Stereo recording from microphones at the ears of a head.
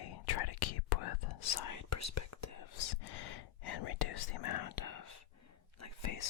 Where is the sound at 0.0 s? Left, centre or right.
Left.